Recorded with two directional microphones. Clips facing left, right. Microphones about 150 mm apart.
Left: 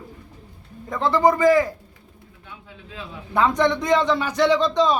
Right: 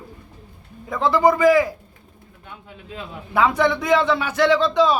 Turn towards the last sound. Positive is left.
turn(degrees=-5)  # may be behind; listen again after turning